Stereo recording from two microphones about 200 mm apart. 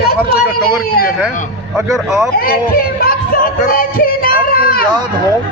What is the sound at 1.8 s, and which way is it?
Speech, centre (ahead or behind).